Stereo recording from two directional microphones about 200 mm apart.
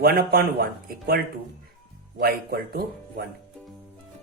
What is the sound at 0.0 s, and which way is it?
Speech, 50° right (ahead or behind).